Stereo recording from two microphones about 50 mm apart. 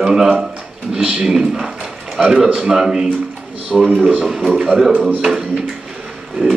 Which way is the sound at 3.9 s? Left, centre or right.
Right.